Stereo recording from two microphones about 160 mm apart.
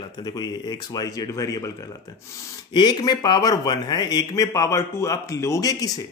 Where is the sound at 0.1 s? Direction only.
25° left (ahead or behind).